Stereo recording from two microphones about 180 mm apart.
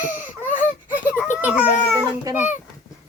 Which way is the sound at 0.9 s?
10° right (ahead or behind).